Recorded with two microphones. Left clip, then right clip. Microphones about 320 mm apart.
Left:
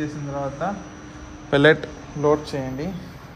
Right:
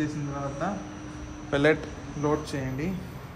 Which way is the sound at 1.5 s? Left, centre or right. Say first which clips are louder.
Left 7 dB; left.